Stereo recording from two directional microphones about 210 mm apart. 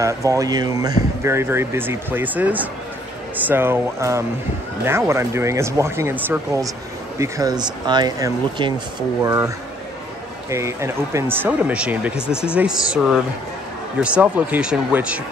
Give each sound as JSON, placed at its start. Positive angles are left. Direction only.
{"t": 0.0, "sound": "speech", "side_deg": -15}
{"t": 10.5, "sound": "speech", "side_deg": -15}